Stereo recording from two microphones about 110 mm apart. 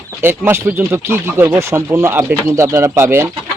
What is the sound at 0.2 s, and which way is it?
Speech, 20° right (ahead or behind).